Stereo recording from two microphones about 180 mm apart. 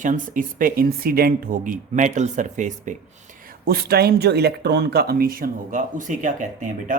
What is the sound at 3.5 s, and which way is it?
A man's voice, 60° right (ahead or behind).